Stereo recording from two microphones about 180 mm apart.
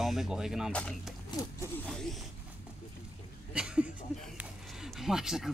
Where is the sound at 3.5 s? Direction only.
5° right (ahead or behind).